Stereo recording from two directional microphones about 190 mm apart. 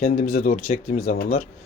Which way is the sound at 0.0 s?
45° left (ahead or behind).